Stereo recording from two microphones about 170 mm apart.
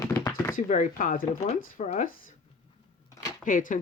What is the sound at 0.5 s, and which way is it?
Speech, 50° left (ahead or behind).